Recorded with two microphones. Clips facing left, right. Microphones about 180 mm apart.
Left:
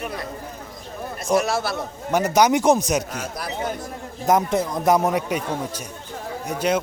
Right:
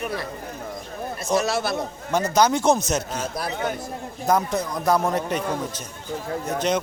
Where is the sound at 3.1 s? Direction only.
30° right (ahead or behind).